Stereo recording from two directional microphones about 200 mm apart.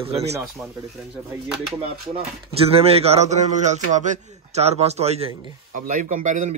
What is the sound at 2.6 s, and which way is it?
A man's voice, 30° right (ahead or behind).